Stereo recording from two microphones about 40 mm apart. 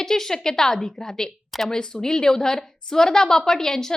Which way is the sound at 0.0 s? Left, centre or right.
Centre.